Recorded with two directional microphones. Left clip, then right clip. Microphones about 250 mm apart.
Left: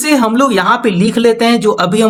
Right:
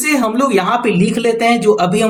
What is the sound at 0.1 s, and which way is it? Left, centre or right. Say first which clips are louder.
A man's voice: left 3 dB; left.